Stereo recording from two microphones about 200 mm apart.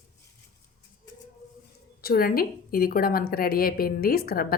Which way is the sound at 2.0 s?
50° left (ahead or behind).